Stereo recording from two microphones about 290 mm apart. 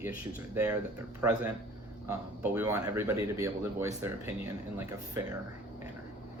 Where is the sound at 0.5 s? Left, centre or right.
Centre.